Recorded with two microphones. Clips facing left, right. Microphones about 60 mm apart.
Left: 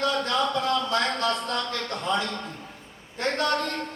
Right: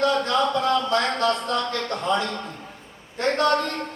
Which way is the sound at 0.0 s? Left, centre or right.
Right.